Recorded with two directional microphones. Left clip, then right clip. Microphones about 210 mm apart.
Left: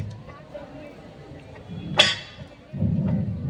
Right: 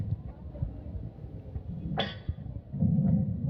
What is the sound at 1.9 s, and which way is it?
Music, 50° left (ahead or behind).